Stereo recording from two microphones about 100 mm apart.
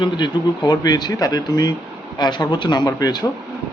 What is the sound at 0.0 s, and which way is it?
A man's voice, 50° left (ahead or behind).